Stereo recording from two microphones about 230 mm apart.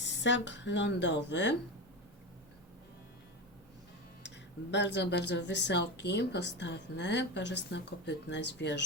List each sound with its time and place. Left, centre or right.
0.0 s speech: left
4.7 s speech: left